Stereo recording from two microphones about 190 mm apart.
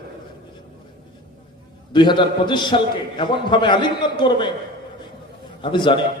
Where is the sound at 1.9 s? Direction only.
25° left (ahead or behind).